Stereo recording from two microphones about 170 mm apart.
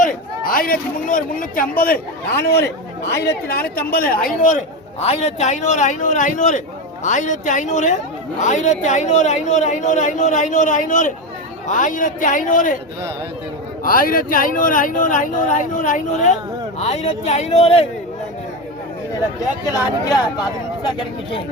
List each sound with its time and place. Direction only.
0.0 s a man's voice: 55° left (ahead or behind)
4.4 s speech: 40° left (ahead or behind)
13.8 s speech: 55° left (ahead or behind); by 17.8 s 40° left (ahead or behind)
19.4 s speech: 20° left (ahead or behind)